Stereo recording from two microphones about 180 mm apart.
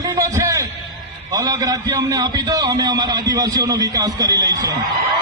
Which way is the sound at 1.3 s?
20° right (ahead or behind).